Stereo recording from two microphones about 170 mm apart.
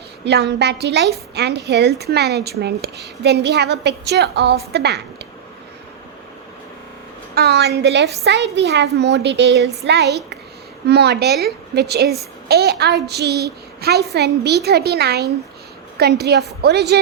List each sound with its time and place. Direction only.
0.3 s a woman's voice: 80° right
7.3 s a woman's voice: 75° right (ahead or behind); by 9.6 s 90° right
9.8 s a woman's voice: 80° right